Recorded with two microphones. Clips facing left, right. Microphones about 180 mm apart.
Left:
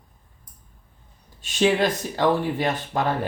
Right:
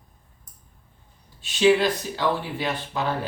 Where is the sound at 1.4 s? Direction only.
45° left (ahead or behind).